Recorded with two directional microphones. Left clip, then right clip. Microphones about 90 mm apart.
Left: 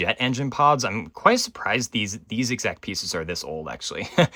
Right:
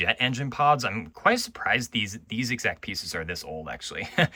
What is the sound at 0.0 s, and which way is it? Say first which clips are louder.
Speech: left 1 dB; 35° left (ahead or behind).